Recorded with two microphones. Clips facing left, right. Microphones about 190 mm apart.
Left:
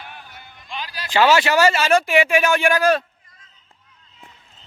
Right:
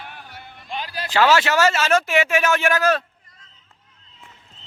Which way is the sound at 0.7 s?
45° right (ahead or behind).